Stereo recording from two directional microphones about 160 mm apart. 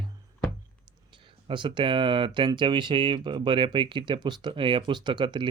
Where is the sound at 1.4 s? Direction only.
30° right (ahead or behind).